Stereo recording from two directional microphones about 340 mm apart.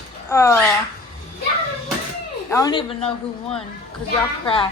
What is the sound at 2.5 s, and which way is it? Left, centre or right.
Speech, centre.